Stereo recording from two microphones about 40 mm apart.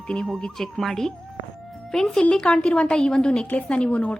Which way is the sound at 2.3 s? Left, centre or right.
Left.